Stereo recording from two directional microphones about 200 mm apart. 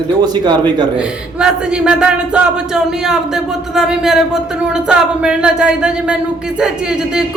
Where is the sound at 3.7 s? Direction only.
Centre (ahead or behind).